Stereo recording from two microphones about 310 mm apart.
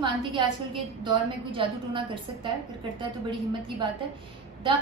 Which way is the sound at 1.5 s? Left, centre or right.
Centre.